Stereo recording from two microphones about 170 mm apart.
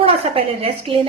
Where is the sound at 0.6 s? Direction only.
30° right (ahead or behind).